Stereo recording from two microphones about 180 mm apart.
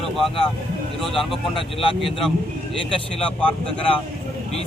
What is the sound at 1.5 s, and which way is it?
Speech, 30° left (ahead or behind).